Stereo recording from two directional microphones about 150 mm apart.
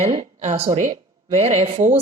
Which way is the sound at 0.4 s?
45° right (ahead or behind).